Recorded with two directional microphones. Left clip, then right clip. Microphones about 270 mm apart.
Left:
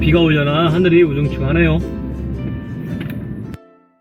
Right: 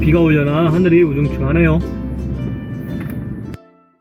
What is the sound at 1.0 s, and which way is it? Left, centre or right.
Speech, centre.